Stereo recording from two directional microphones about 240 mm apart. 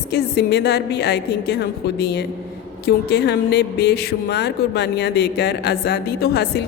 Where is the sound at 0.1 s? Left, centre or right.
Left.